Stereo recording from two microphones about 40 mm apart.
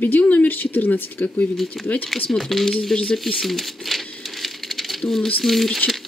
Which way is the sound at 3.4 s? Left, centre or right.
Centre.